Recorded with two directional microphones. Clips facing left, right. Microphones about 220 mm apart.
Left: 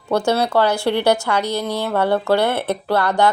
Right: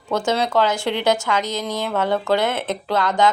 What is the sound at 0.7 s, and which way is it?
Speech, 60° left (ahead or behind).